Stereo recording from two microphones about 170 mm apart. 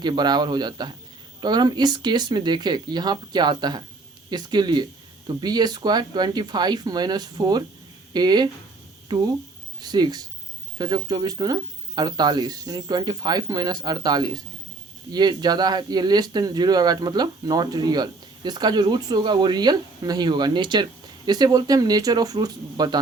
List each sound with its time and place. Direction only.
0.0 s speech: 25° right (ahead or behind)